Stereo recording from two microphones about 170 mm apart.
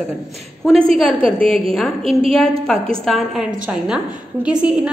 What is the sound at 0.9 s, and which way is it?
A woman's voice, centre (ahead or behind).